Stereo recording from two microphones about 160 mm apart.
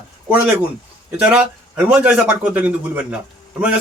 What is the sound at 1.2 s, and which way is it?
Speech, 5° right (ahead or behind).